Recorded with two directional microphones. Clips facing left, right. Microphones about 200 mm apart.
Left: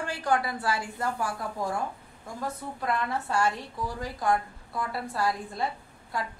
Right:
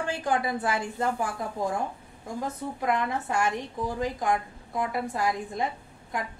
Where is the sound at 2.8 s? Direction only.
15° right (ahead or behind).